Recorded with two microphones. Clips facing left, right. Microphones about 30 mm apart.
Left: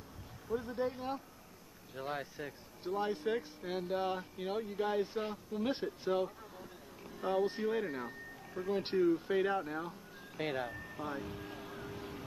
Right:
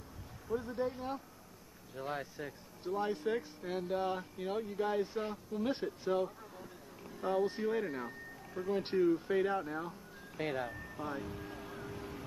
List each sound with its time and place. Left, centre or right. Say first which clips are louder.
0.6 s speech: even; centre
9.7 s music: even; centre